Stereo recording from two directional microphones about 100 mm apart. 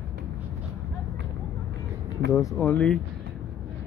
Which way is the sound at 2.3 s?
35° left (ahead or behind).